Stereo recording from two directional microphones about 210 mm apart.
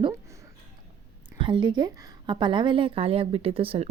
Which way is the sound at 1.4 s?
25° right (ahead or behind).